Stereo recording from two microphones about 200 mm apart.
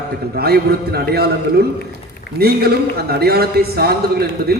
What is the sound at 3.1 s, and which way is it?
Speech, 50° right (ahead or behind).